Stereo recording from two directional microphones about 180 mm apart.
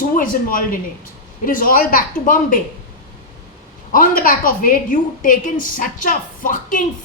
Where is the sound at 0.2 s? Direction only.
50° left (ahead or behind).